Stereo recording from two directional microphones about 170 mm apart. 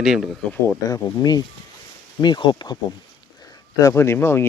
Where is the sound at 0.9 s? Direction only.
20° left (ahead or behind).